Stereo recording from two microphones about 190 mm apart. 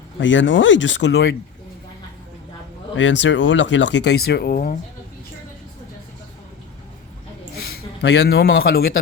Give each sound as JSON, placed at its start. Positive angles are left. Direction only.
{"t": 0.2, "sound": "speech", "side_deg": 80}
{"t": 2.9, "sound": "speech", "side_deg": 75}
{"t": 8.0, "sound": "speech", "side_deg": 65}